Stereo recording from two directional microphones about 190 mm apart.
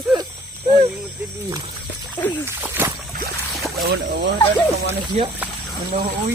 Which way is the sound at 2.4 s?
10° right (ahead or behind).